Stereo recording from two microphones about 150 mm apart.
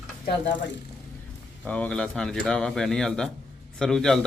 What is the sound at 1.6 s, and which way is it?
A man's voice, 10° left (ahead or behind).